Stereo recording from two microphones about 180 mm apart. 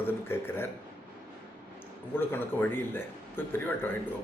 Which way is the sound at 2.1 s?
10° left (ahead or behind).